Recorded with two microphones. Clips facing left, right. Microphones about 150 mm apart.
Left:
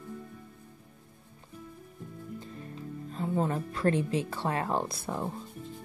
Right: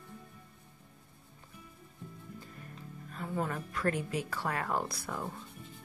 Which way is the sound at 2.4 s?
25° left (ahead or behind).